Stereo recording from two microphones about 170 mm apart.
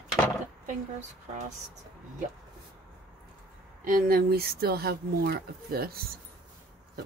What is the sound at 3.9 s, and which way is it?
Speech, 60° right (ahead or behind).